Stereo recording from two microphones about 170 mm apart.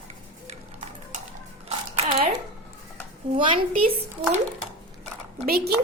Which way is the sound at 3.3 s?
30° right (ahead or behind).